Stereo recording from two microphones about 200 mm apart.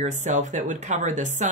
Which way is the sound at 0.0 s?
35° right (ahead or behind).